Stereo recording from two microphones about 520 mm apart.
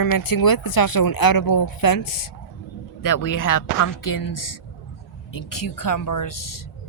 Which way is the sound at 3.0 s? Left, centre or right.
Left.